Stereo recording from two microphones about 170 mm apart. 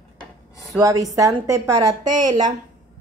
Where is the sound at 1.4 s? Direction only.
20° right (ahead or behind).